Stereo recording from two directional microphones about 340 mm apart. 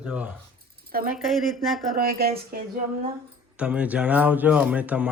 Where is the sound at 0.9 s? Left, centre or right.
Right.